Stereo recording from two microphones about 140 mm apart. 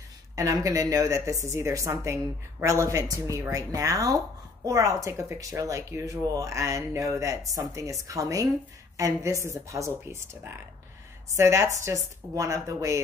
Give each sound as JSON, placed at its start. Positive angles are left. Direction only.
{"t": 0.4, "sound": "speech", "side_deg": -25}